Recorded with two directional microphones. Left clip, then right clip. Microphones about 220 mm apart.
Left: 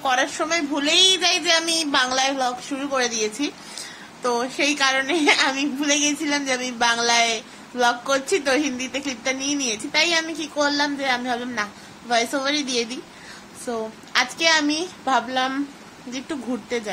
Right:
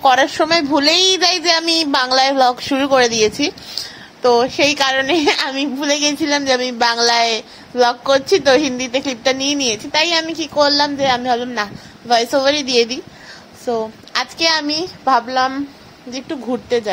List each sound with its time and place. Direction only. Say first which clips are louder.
0.0 s a child's voice: right 9 dB; 25° right (ahead or behind)